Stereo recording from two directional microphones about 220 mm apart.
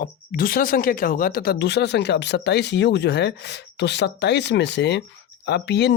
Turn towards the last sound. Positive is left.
turn(degrees=50)  # may be behind; listen again after turning